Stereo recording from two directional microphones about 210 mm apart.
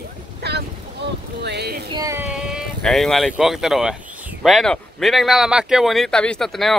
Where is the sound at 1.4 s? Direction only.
50° right (ahead or behind).